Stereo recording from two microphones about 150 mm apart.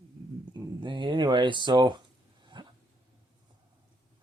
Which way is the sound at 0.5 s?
30° right (ahead or behind).